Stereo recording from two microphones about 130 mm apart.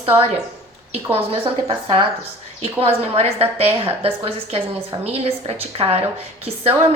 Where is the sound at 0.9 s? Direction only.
50° right (ahead or behind).